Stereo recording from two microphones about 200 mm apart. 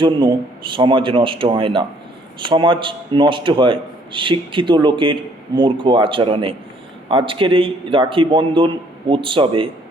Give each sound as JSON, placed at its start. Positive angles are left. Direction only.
{"t": 0.0, "sound": "a man's voice", "side_deg": -25}